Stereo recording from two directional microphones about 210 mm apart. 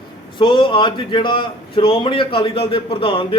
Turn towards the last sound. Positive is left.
turn(degrees=25)  # may be behind; listen again after turning